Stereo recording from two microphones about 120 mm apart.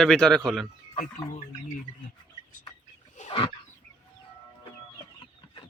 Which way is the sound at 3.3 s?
45° left (ahead or behind).